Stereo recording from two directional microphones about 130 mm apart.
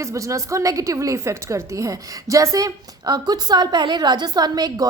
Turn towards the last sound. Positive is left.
turn(degrees=-30)  # may be behind; listen again after turning